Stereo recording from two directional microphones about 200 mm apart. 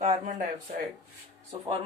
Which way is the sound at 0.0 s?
40° right (ahead or behind).